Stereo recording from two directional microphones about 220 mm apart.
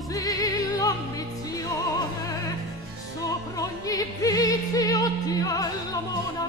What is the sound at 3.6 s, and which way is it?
Music, 15° left (ahead or behind).